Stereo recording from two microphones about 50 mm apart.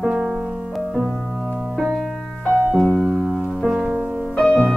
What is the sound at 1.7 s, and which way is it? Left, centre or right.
Music, centre.